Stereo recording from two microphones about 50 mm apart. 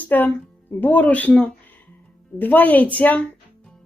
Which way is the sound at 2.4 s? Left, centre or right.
Left.